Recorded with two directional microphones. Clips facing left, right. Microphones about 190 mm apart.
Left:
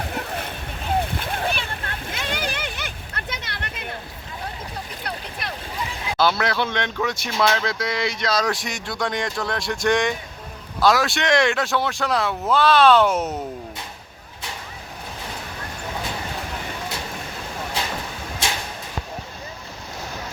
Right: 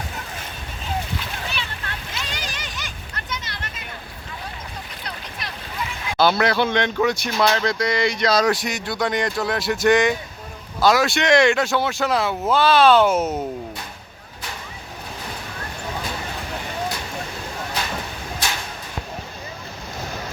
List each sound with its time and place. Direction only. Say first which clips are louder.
0.0 s splash: left 5 dB; 60° left (ahead or behind)
6.1 s speech: right 3 dB; centre (ahead or behind)